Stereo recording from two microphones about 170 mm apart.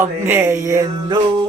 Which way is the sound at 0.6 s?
20° right (ahead or behind).